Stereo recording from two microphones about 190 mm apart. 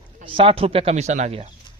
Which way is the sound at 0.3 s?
30° right (ahead or behind).